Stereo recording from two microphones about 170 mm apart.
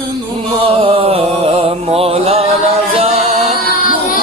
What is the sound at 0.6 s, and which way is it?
Music, 35° right (ahead or behind).